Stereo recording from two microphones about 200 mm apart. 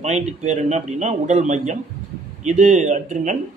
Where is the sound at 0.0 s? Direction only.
35° right (ahead or behind).